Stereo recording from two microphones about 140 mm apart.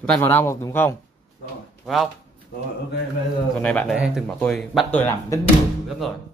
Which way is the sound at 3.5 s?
5° left (ahead or behind).